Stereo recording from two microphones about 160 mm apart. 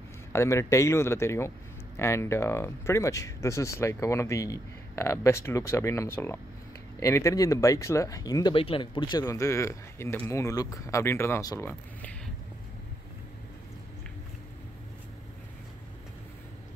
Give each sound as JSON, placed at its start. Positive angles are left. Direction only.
{"t": 0.3, "sound": "speech", "side_deg": 15}